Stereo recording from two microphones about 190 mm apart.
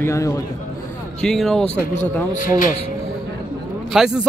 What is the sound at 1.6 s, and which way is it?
Speech, 35° left (ahead or behind).